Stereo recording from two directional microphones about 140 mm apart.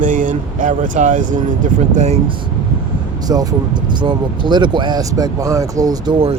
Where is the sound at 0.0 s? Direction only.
70° right (ahead or behind).